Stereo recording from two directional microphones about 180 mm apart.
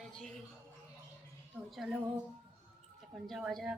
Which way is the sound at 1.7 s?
Centre (ahead or behind).